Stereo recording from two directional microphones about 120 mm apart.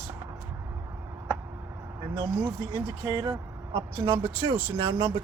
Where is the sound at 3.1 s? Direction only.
30° right (ahead or behind).